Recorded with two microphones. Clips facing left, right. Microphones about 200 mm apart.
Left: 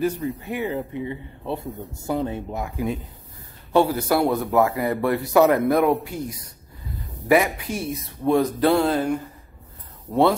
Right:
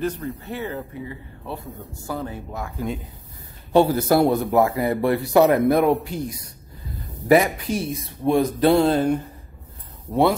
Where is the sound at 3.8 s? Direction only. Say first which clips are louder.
Right 4 dB; 40° right (ahead or behind).